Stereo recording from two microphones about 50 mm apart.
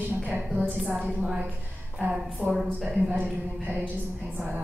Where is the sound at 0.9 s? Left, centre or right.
Right.